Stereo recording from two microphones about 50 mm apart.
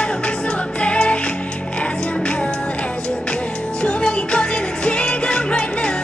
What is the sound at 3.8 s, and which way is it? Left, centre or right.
Music, centre.